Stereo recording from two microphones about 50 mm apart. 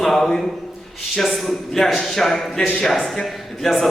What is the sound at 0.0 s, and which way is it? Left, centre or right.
A man's voice, centre.